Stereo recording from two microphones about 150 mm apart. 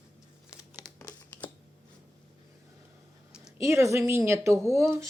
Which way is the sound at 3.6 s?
20° right (ahead or behind).